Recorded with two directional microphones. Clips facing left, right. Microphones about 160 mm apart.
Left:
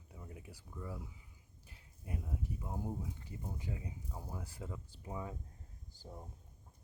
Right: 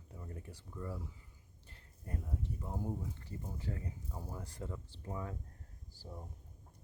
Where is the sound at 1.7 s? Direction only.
10° left (ahead or behind).